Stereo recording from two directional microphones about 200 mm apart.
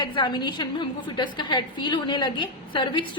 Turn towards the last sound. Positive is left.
turn(degrees=25)  # may be behind; listen again after turning